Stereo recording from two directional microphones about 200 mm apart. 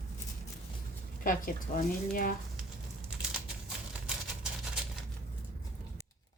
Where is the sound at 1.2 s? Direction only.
45° left (ahead or behind).